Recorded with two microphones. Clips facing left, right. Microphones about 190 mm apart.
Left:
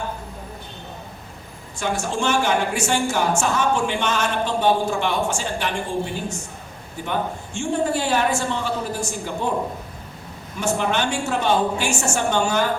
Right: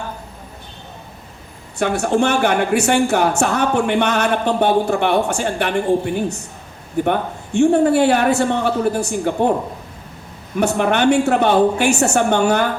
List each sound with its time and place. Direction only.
1.8 s a woman's voice: 60° right (ahead or behind)
10.6 s a woman's voice: 60° right (ahead or behind)